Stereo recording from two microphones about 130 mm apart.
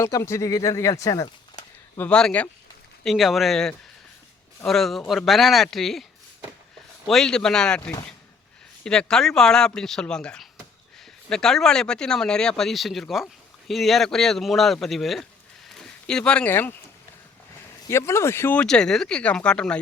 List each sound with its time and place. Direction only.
0.0 s speech: 20° left (ahead or behind)
2.0 s speech: 5° left (ahead or behind)
7.1 s speech: 5° left (ahead or behind)
17.8 s speech: 20° left (ahead or behind)
18.6 s speech: 5° left (ahead or behind)